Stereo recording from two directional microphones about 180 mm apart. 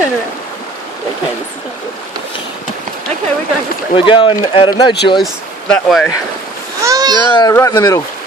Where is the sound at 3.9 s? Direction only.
30° left (ahead or behind).